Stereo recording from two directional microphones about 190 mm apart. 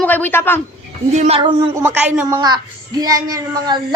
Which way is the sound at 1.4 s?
25° right (ahead or behind).